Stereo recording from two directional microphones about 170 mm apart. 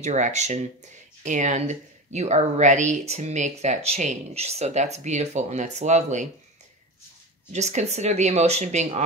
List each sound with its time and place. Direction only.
0.0 s speech: 45° right (ahead or behind)
7.5 s speech: 40° right (ahead or behind)